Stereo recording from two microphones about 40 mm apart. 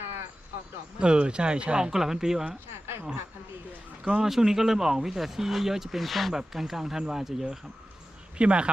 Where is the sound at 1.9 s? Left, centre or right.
Centre.